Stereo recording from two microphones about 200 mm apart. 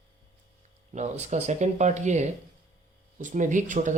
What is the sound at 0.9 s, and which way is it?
Speech, 35° right (ahead or behind).